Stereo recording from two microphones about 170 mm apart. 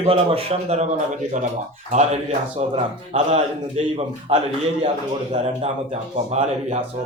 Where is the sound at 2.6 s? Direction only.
40° right (ahead or behind).